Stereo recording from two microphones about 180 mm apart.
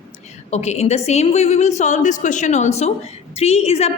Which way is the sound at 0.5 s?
40° left (ahead or behind).